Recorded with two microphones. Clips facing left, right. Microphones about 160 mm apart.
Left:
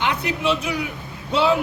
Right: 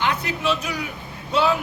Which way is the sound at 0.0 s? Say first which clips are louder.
Left 1 dB; 20° left (ahead or behind).